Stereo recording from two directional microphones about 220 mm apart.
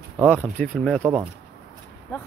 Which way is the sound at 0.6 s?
5° left (ahead or behind).